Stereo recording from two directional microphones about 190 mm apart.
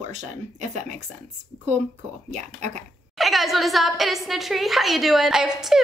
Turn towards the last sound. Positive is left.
turn(degrees=0)  # may be behind; listen again after turning